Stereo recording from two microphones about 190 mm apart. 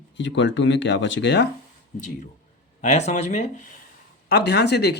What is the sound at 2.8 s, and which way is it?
Speech, 40° left (ahead or behind).